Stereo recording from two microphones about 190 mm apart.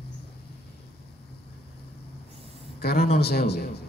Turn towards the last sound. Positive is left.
turn(degrees=55)  # may be behind; listen again after turning